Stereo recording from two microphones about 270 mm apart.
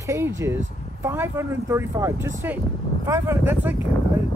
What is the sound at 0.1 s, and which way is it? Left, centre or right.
Speech, centre.